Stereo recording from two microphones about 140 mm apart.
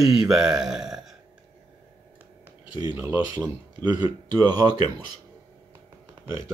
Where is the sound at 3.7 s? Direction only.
30° right (ahead or behind).